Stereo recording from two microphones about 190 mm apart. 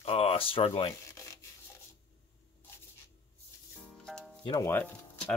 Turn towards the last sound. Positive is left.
turn(degrees=10)  # may be behind; listen again after turning